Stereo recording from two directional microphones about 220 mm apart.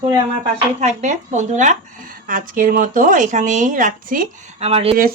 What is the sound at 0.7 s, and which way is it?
Speech, 30° right (ahead or behind).